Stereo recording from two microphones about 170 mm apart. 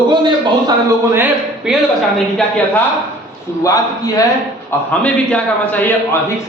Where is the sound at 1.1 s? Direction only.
10° right (ahead or behind).